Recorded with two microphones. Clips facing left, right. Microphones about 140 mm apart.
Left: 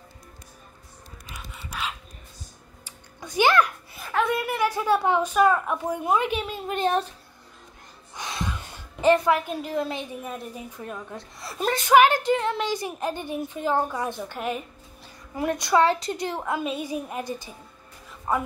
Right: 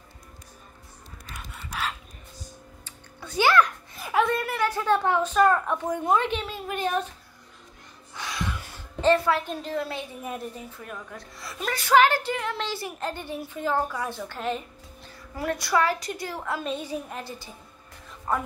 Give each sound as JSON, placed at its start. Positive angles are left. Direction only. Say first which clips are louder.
{"t": 1.5, "sound": "dog", "louder": "right 1 dB", "side_deg": 0}
{"t": 2.8, "sound": "a sound", "louder": "left 5 dB", "side_deg": 15}
{"t": 4.0, "sound": "a sound", "louder": "right 2 dB", "side_deg": -10}
{"t": 4.3, "sound": "a woman's voice", "louder": "left 1 dB", "side_deg": 10}
{"t": 8.1, "sound": "music", "louder": "left 1 dB", "side_deg": 20}
{"t": 10.8, "sound": "a woman's voice", "louder": "left 3 dB", "side_deg": 25}